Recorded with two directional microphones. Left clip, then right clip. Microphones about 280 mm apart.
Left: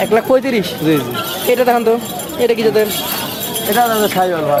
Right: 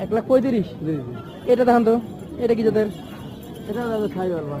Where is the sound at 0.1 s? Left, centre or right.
Centre.